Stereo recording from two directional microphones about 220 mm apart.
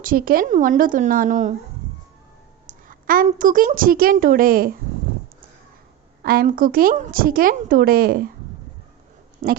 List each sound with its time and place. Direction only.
0.0 s a woman's voice: 40° right (ahead or behind)
2.6 s a woman's voice: 40° right (ahead or behind)
6.2 s a woman's voice: 40° right (ahead or behind)
9.4 s speech: 40° right (ahead or behind)